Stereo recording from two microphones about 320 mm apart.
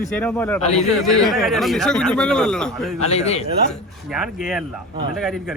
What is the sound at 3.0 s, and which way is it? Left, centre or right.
Speech, centre.